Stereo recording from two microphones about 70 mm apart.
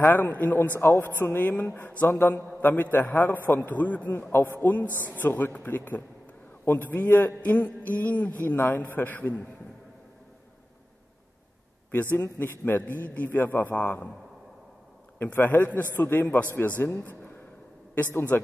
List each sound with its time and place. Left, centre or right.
0.1 s a man's voice: left
0.7 s a man's voice: left
11.9 s a man's voice: left
15.3 s a man's voice: left
18.3 s a man's voice: left